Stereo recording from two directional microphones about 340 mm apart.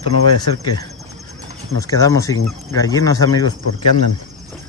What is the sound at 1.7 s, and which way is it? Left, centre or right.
Speech, centre.